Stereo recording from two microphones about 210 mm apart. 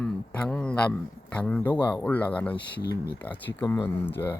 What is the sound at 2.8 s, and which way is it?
Speech, 50° left (ahead or behind).